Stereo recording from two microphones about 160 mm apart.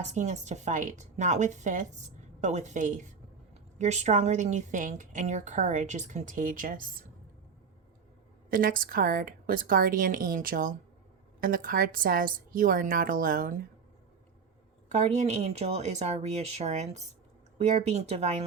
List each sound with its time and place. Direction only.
0.1 s a woman's voice: 45° right (ahead or behind)
8.4 s speech: 60° right (ahead or behind)
14.9 s a woman's voice: 40° right (ahead or behind)